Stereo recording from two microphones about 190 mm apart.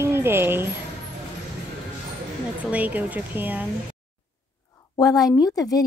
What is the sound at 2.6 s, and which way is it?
A child's voice, 10° right (ahead or behind).